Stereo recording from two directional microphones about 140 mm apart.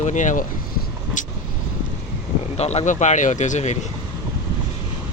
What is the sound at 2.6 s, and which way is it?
Speech, 50° left (ahead or behind).